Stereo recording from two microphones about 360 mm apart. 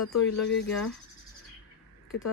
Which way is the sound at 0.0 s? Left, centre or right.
Left.